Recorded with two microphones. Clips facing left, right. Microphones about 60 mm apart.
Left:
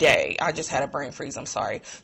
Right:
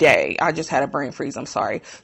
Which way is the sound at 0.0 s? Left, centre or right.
Right.